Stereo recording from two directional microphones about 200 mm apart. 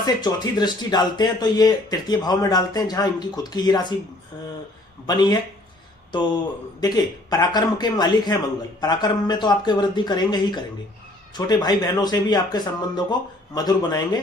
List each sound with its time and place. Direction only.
0.0 s speech: 20° left (ahead or behind)
5.0 s speech: 20° left (ahead or behind)
6.7 s speech: 20° left (ahead or behind)